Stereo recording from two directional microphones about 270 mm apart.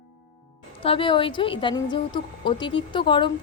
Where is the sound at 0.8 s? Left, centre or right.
Centre.